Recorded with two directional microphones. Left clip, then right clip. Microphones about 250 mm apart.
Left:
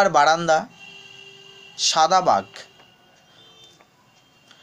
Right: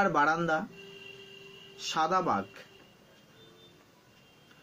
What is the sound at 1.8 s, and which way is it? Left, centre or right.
Speech, left.